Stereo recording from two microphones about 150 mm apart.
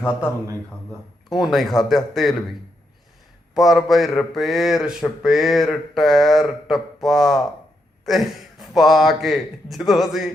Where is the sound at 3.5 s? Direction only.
Centre (ahead or behind).